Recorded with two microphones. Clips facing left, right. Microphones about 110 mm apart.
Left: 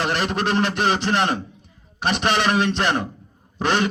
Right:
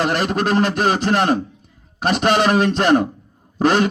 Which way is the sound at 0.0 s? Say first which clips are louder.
Right 4 dB; 45° right (ahead or behind).